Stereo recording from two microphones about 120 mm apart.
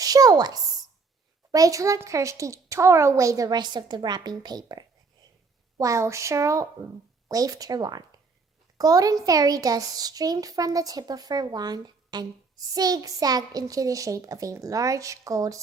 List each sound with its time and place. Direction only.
0.0 s a woman's voice: 30° right (ahead or behind)